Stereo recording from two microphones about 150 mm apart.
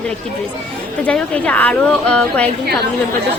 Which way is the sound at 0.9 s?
10° left (ahead or behind).